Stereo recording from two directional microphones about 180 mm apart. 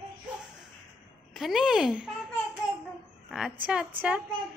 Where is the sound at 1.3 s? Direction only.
Centre (ahead or behind).